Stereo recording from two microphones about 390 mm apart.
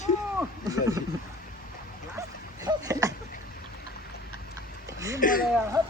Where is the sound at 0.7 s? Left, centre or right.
Centre.